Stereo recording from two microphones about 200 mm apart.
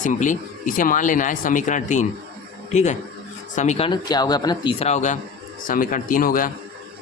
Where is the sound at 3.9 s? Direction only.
20° left (ahead or behind).